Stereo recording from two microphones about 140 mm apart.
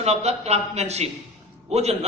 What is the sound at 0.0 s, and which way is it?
A man's voice, 50° right (ahead or behind).